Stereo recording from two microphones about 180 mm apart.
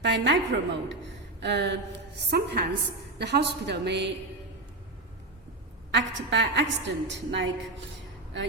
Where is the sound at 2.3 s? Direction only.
60° right (ahead or behind).